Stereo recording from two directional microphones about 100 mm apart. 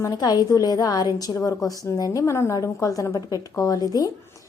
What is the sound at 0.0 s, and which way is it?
A woman's voice, 40° left (ahead or behind).